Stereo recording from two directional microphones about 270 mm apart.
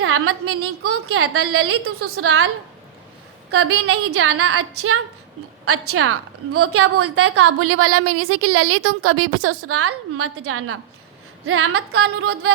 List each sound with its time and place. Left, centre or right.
0.0 s a woman's voice: right
3.5 s a woman's voice: right